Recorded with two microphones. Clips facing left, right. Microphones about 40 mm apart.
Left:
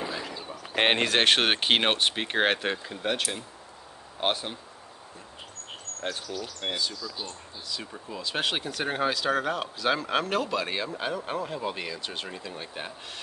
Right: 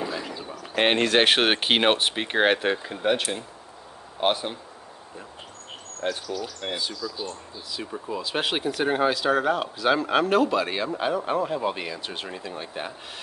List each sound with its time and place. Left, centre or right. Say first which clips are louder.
0.2 s a sound: right 2 dB; centre
0.6 s bird: right 2 dB; centre
1.0 s speech: right 3 dB; centre
6.0 s speech: right 5 dB; centre
7.8 s speech: right 10 dB; centre